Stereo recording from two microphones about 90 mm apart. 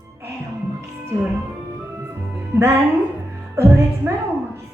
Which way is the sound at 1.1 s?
30° right (ahead or behind).